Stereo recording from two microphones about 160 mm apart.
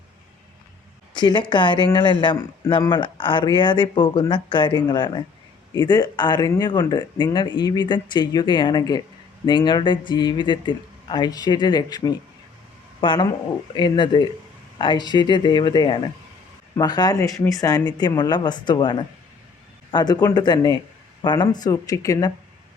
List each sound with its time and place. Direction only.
1.1 s speech: 30° left (ahead or behind)